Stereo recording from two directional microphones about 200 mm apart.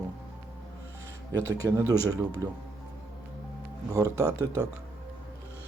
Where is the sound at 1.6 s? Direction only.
15° right (ahead or behind).